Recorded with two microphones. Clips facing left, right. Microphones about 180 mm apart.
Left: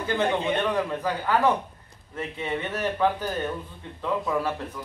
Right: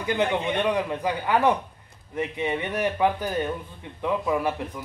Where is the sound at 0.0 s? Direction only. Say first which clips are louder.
Even; 15° right (ahead or behind).